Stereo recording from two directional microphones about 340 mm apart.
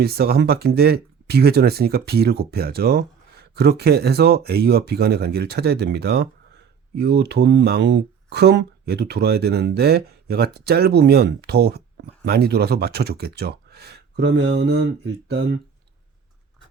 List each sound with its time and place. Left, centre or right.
0.0 s speech: right